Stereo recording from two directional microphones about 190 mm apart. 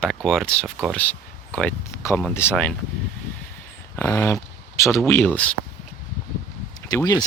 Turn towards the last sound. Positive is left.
turn(degrees=20)  # may be behind; listen again after turning